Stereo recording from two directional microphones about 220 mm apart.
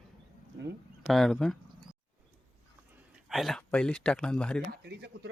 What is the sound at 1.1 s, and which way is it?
Speech, centre (ahead or behind).